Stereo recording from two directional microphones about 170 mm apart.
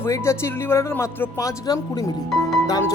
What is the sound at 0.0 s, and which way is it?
Speech, 15° left (ahead or behind).